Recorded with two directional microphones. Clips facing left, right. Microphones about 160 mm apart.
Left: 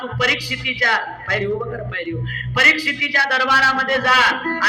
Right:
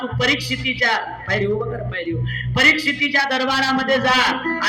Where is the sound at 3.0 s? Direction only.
30° right (ahead or behind).